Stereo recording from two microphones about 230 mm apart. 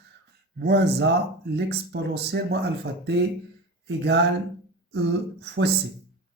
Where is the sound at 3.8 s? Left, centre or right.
Right.